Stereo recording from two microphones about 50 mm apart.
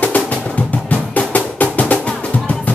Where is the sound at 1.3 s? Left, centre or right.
Left.